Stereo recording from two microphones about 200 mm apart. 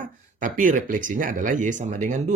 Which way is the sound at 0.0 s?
40° right (ahead or behind).